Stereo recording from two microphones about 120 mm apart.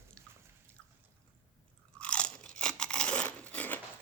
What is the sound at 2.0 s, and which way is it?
Crunch, 10° left (ahead or behind).